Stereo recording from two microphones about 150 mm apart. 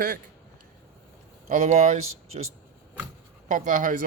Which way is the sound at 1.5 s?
55° right (ahead or behind).